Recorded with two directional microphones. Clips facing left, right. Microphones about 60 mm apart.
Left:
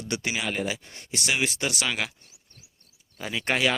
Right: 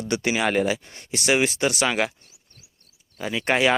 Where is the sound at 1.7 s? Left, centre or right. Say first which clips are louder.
Right 6 dB; centre.